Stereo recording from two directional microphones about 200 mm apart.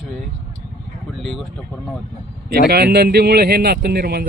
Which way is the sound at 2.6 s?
55° right (ahead or behind).